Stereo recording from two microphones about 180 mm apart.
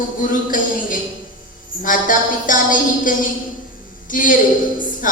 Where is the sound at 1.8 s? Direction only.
50° left (ahead or behind).